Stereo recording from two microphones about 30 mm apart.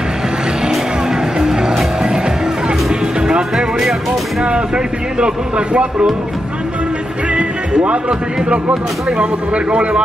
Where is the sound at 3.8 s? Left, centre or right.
Centre.